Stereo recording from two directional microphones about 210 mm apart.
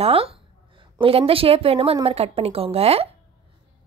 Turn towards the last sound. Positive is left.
turn(degrees=-30)  # may be behind; listen again after turning